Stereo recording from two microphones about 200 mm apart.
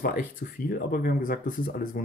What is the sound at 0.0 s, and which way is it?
Speech, 45° left (ahead or behind).